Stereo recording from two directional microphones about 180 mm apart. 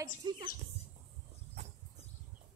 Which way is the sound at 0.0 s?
20° right (ahead or behind).